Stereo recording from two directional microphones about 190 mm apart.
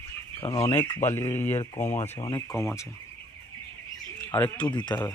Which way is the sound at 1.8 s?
35° left (ahead or behind).